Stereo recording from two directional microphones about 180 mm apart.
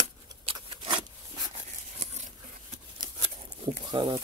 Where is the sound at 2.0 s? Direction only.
40° right (ahead or behind).